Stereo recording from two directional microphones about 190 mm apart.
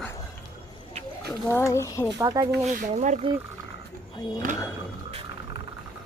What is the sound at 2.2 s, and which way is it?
Speech, 20° right (ahead or behind).